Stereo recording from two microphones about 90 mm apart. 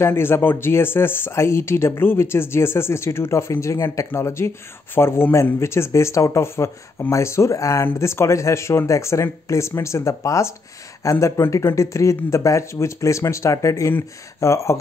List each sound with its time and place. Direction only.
0.0 s speech: 25° left (ahead or behind)